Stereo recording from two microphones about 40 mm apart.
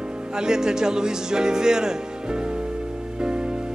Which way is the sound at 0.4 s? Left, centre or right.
Centre.